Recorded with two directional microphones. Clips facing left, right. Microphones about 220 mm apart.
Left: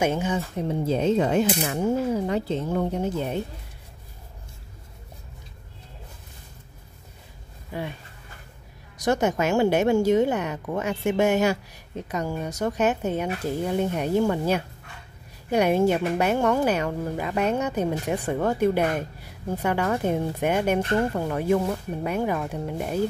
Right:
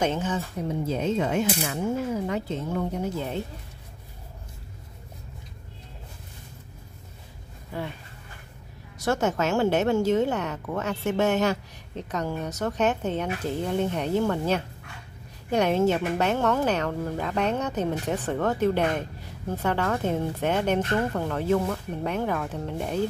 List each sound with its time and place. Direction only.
0.0 s a woman's voice: 10° left (ahead or behind)
0.6 s speech: 30° left (ahead or behind)
3.2 s a woman's voice: 15° left (ahead or behind)
8.9 s a woman's voice: 15° left (ahead or behind)